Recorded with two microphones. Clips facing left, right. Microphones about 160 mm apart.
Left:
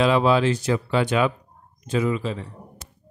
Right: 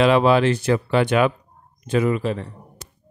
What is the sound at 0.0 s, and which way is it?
Speech, 65° right (ahead or behind).